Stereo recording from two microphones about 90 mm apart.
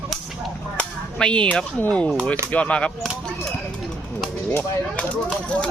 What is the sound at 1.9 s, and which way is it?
Speech, 10° left (ahead or behind).